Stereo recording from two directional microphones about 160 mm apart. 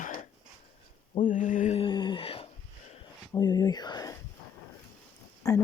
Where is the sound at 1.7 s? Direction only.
30° left (ahead or behind).